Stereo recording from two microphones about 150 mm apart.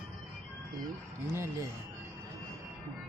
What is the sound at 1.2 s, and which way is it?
Speech, 20° right (ahead or behind).